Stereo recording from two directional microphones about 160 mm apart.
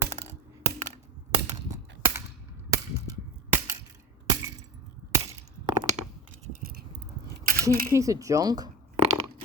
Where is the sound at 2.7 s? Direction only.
15° right (ahead or behind).